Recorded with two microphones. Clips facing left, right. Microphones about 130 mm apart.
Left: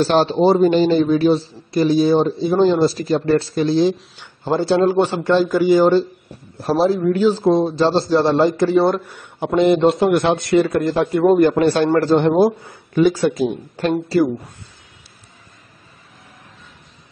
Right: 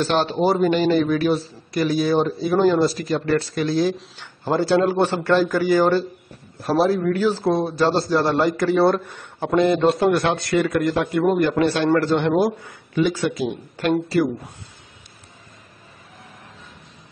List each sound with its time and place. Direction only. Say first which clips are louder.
0.0 s speech: left 5 dB; 35° left (ahead or behind)
4.9 s a man's voice: left 2 dB; 15° left (ahead or behind); by 14.2 s 35° left (ahead or behind)